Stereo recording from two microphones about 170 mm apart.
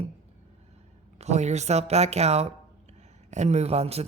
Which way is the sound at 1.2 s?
40° right (ahead or behind).